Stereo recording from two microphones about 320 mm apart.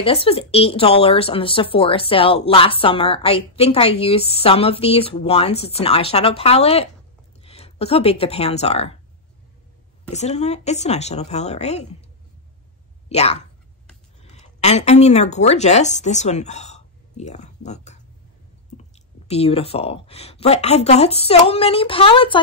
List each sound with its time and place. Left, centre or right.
0.0 s speech: centre
10.1 s a woman's voice: left
13.1 s a woman's voice: centre